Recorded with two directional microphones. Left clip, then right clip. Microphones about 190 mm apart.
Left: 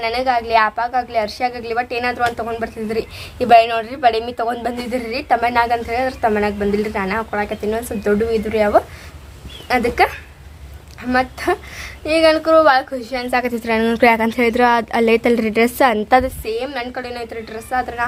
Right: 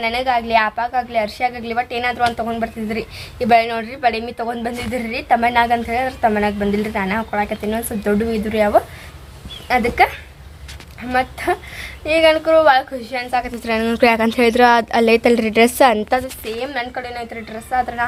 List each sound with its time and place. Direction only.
0.0 s a woman's voice: centre (ahead or behind)
3.3 s a woman's voice: 30° left (ahead or behind)
4.9 s a woman's voice: centre (ahead or behind)